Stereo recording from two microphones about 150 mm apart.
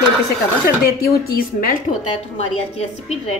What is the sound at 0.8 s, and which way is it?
A woman's voice, 90° left.